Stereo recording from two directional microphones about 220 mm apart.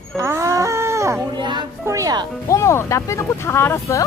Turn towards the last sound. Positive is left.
turn(degrees=10)  # may be behind; listen again after turning